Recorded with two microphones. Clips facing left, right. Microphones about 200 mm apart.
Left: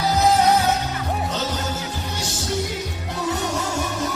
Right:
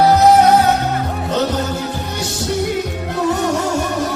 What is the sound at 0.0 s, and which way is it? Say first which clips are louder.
Music: right 8 dB; 60° right (ahead or behind).